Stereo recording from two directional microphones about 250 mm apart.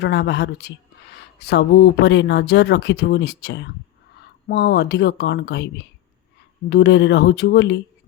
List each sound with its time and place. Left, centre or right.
0.0 s speech: left